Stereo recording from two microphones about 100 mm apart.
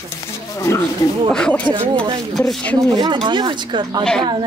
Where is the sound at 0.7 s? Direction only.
30° left (ahead or behind).